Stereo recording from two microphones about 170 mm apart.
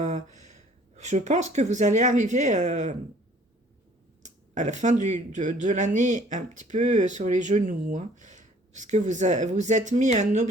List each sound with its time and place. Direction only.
0.0 s speech: 45° right (ahead or behind)
4.2 s speech: 45° right (ahead or behind)